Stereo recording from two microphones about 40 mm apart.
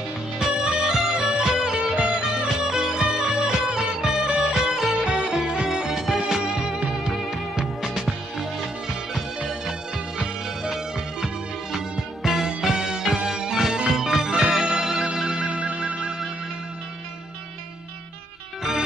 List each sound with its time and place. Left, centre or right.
0.4 s music: centre
11.7 s music: centre
15.4 s music: right